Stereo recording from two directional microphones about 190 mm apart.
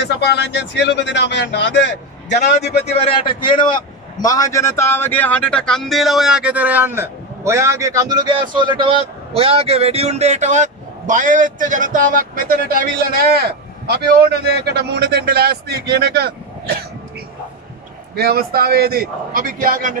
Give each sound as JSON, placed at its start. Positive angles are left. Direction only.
{"t": 0.0, "sound": "speech", "side_deg": 60}
{"t": 2.8, "sound": "a man's voice", "side_deg": 30}
{"t": 18.1, "sound": "a man's voice", "side_deg": -55}